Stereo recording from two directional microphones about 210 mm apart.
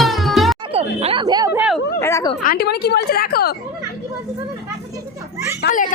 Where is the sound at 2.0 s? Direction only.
15° left (ahead or behind).